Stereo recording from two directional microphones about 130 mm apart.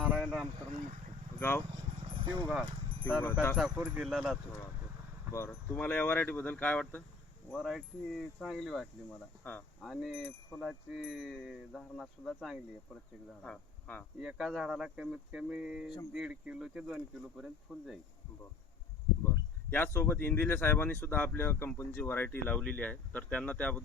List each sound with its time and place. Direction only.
0.1 s vehicle: 5° right (ahead or behind)
1.4 s speech: 20° left (ahead or behind)
2.0 s vehicle: 45° right (ahead or behind)
3.0 s speech: 10° left (ahead or behind)
3.6 s wind chime: 10° right (ahead or behind)
5.5 s speech: 10° left (ahead or behind)
7.5 s wind chime: centre (ahead or behind)
9.4 s speech: 15° left (ahead or behind)
9.8 s wind chime: centre (ahead or behind)
10.2 s wind chime: 10° left (ahead or behind)
13.4 s speech: 10° left (ahead or behind)
14.2 s speech: 5° right (ahead or behind)
16.1 s wind chime: 10° right (ahead or behind)
19.2 s speech: 20° left (ahead or behind)